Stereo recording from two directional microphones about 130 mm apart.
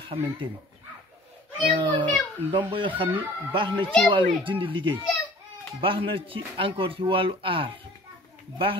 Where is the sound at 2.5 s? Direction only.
40° right (ahead or behind).